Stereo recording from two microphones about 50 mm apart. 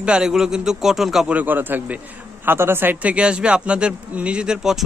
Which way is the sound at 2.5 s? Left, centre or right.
Right.